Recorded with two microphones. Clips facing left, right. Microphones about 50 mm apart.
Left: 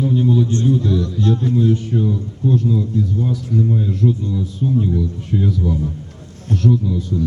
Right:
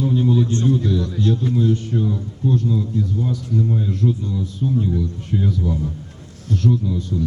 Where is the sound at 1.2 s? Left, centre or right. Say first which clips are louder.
Left 1 dB; left.